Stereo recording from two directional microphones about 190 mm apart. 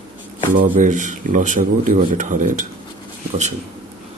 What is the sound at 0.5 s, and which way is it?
Speech, 45° right (ahead or behind).